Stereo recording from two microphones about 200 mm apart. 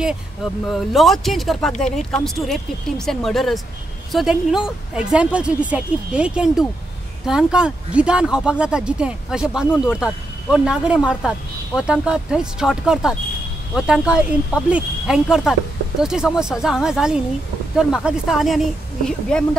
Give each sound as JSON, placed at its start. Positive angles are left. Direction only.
{"t": 0.0, "sound": "speech", "side_deg": 0}